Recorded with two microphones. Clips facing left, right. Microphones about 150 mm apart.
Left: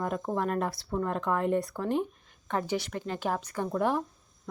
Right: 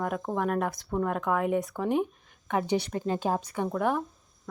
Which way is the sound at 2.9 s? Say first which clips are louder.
Right 4 dB; 25° right (ahead or behind).